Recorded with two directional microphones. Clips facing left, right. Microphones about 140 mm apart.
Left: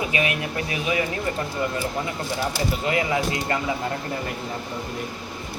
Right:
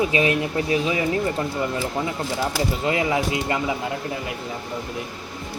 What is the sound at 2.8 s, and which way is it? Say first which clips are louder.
Speech: right 1 dB; 25° right (ahead or behind).